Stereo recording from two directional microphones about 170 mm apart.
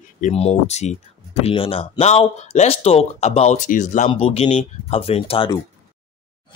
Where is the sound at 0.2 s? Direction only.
40° left (ahead or behind).